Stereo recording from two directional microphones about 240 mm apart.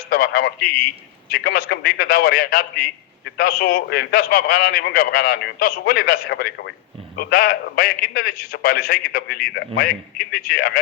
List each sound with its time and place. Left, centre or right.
0.1 s a man's voice: left